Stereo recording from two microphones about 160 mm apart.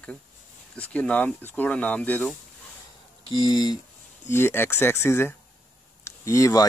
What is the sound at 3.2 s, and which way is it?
Speech, 25° left (ahead or behind).